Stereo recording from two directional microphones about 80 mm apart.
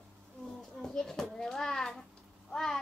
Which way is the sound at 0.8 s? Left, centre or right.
Centre.